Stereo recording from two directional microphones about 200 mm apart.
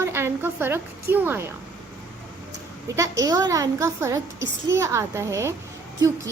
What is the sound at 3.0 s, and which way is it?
A woman's voice, 15° right (ahead or behind).